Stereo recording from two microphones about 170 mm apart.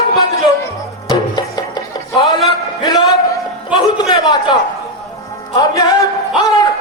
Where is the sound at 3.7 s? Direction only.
25° left (ahead or behind).